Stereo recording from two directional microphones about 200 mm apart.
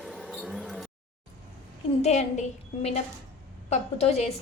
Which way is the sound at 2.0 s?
30° left (ahead or behind).